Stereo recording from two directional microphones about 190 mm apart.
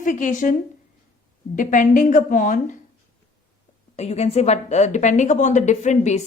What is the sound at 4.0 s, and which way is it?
A woman's voice, 35° left (ahead or behind).